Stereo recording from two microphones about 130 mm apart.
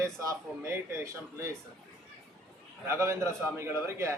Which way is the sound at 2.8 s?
20° right (ahead or behind).